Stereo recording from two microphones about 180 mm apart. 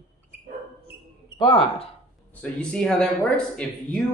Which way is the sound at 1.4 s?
30° left (ahead or behind).